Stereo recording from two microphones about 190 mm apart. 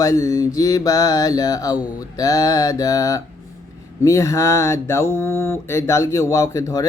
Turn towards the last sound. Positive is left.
turn(degrees=15)  # may be behind; listen again after turning